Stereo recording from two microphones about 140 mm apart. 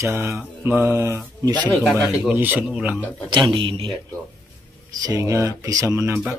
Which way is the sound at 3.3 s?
35° right (ahead or behind).